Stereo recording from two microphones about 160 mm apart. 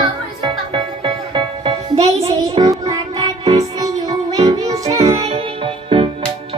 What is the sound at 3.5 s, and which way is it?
Music, 20° right (ahead or behind).